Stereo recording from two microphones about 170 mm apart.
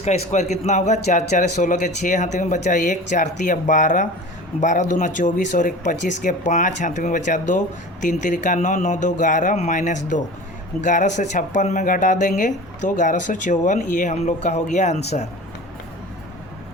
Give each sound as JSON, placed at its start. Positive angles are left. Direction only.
{"t": 0.0, "sound": "speech", "side_deg": 40}